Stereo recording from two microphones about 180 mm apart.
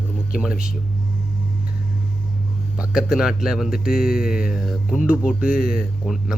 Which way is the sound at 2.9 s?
5° right (ahead or behind).